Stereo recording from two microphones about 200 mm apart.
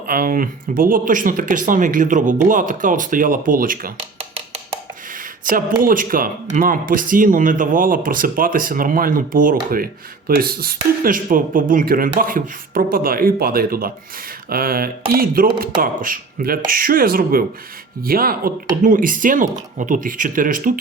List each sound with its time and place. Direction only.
0.1 s speech: 45° right (ahead or behind)
5.1 s a sound: 45° right (ahead or behind)
5.8 s speech: 45° right (ahead or behind)